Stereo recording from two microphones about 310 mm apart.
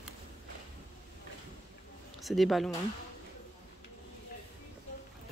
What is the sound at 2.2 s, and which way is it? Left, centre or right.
Speech, centre.